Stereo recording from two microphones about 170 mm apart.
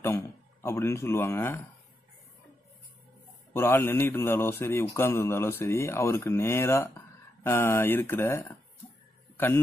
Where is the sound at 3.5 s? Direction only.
15° left (ahead or behind).